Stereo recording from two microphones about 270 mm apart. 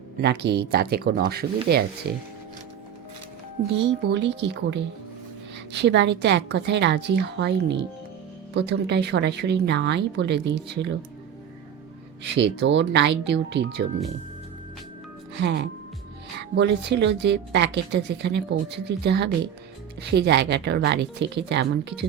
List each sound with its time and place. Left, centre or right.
0.2 s a woman's voice: right
3.6 s a woman's voice: right
12.2 s a woman's voice: right
15.4 s a woman's voice: right